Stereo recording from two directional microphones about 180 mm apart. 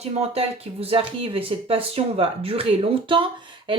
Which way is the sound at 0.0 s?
35° right (ahead or behind).